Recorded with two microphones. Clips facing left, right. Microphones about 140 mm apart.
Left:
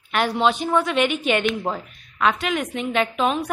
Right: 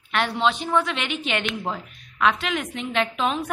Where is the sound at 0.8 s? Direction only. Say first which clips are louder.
Left 8 dB; 50° left (ahead or behind).